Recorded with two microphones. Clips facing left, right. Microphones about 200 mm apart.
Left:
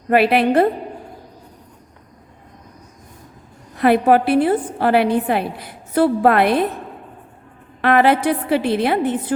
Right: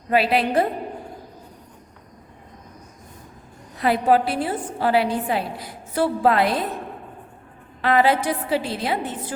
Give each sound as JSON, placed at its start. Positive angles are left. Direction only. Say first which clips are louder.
{"t": 0.1, "sound": "a woman's voice", "louder": "left 5 dB", "side_deg": 60}
{"t": 3.8, "sound": "a woman's voice", "louder": "left 5 dB", "side_deg": 60}
{"t": 7.8, "sound": "a woman's voice", "louder": "left 4 dB", "side_deg": 60}